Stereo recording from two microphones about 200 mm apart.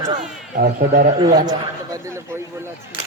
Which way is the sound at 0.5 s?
45° right (ahead or behind).